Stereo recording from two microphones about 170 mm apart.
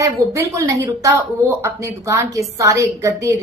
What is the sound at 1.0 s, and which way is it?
A woman's voice, 20° right (ahead or behind).